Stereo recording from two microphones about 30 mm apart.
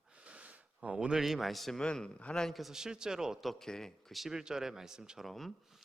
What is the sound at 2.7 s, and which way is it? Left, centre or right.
Speech, right.